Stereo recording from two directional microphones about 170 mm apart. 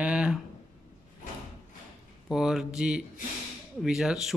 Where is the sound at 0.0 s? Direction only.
5° right (ahead or behind).